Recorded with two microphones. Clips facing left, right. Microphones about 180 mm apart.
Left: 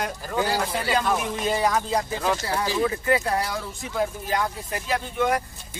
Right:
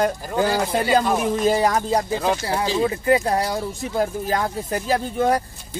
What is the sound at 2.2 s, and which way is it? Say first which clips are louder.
Speech: right 3 dB; 20° right (ahead or behind).